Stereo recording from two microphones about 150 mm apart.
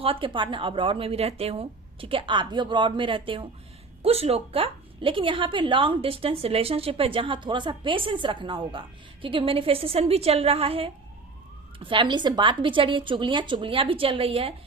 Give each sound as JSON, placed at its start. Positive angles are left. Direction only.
{"t": 0.0, "sound": "a woman's voice", "side_deg": -35}